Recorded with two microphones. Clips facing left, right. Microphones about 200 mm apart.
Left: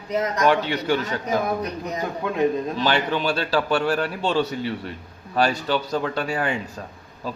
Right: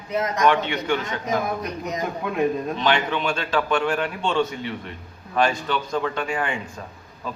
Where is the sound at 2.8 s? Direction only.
35° left (ahead or behind).